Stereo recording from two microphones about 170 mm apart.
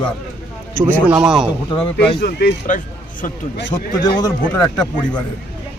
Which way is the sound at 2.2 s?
70° left (ahead or behind).